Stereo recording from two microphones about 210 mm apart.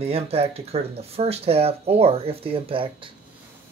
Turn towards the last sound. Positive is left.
turn(degrees=-25)  # may be behind; listen again after turning